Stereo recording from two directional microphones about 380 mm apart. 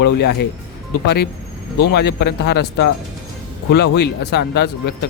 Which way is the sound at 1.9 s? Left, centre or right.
Left.